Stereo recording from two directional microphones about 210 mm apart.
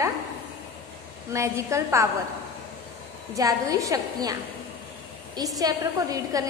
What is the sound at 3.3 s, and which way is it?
A woman's voice, 15° right (ahead or behind).